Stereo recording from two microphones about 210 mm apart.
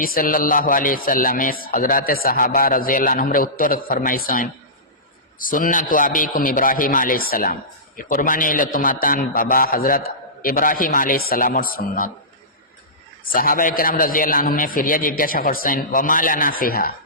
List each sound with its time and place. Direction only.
0.0 s speech: 45° left (ahead or behind)
13.3 s speech: 40° left (ahead or behind)